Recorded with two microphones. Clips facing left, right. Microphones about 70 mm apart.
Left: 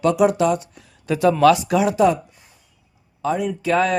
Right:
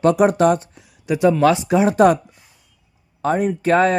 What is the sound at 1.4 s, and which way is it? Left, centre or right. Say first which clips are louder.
Speech: even; right.